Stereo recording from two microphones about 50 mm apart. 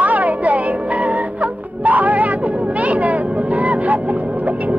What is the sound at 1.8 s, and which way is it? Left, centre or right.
Music, right.